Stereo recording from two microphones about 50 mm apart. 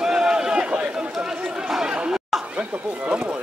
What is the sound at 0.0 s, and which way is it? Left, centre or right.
Run, centre.